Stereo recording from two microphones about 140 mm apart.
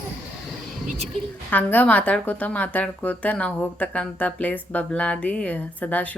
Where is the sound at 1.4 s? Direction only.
10° left (ahead or behind).